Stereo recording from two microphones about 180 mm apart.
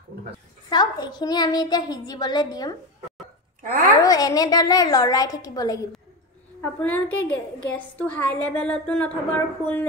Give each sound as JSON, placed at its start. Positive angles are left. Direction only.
{"t": 0.7, "sound": "a child's voice", "side_deg": 25}
{"t": 4.0, "sound": "a child's voice", "side_deg": 20}
{"t": 6.6, "sound": "a woman's voice", "side_deg": 10}